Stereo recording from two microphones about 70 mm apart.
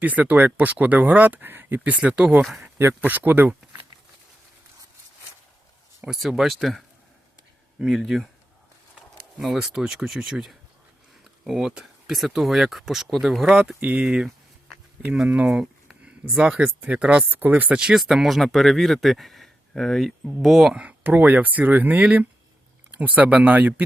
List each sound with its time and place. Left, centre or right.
0.0 s speech: right
2.7 s speech: right
6.1 s speech: centre
9.4 s speech: centre
13.7 s speech: centre
15.4 s speech: centre
20.7 s speech: right